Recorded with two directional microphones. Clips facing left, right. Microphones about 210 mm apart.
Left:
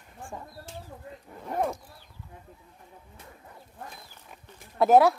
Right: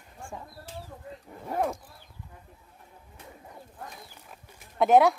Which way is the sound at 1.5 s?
5° right (ahead or behind).